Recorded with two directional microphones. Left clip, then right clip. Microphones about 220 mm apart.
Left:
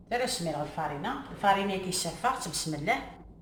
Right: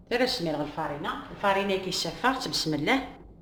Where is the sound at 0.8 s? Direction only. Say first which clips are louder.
Right 1 dB; 50° right (ahead or behind).